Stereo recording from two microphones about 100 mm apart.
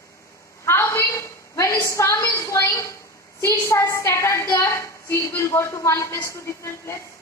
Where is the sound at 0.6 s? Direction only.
25° left (ahead or behind).